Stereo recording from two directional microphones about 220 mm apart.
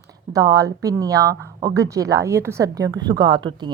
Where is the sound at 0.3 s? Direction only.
15° right (ahead or behind).